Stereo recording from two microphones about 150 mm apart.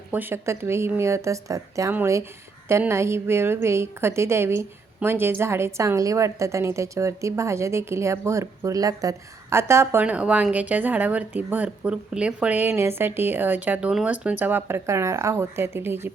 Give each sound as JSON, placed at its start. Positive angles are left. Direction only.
{"t": 0.1, "sound": "a woman's voice", "side_deg": -15}